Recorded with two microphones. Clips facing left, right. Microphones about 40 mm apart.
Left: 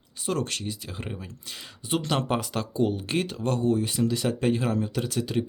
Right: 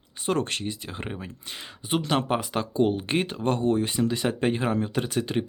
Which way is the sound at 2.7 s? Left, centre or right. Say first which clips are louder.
Right 3 dB; right.